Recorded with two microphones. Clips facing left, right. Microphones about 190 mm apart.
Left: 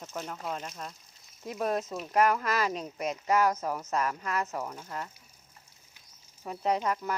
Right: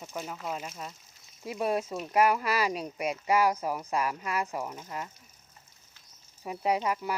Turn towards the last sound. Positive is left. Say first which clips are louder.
# even
turn(degrees=-10)  # may be behind; listen again after turning